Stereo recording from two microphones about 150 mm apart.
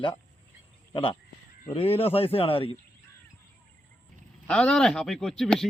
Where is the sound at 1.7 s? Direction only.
40° left (ahead or behind).